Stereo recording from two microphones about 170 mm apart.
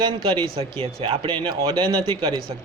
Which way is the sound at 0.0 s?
30° right (ahead or behind).